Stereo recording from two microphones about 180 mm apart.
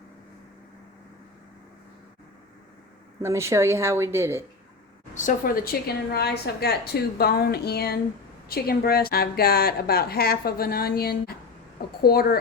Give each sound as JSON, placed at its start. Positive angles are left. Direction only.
{"t": 3.2, "sound": "a woman's voice", "side_deg": -15}
{"t": 5.1, "sound": "speech", "side_deg": 50}
{"t": 6.1, "sound": "a woman's voice", "side_deg": 60}